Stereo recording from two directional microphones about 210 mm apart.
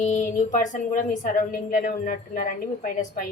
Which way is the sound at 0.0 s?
35° left (ahead or behind).